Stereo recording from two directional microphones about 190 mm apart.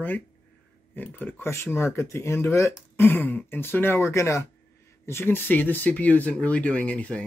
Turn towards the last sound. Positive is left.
turn(degrees=5)  # may be behind; listen again after turning